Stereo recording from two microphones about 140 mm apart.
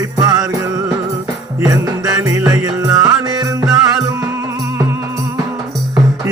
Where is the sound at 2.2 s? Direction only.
25° right (ahead or behind).